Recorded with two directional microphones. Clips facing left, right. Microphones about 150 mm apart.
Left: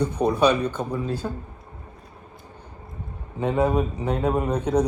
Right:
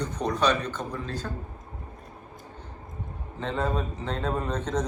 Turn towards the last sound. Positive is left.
turn(degrees=10)  # may be behind; listen again after turning